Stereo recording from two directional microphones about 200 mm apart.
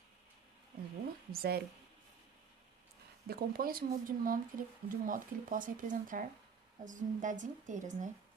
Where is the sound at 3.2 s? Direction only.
50° right (ahead or behind).